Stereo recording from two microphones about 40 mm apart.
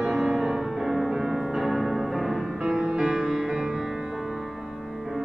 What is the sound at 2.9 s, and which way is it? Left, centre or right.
Music, centre.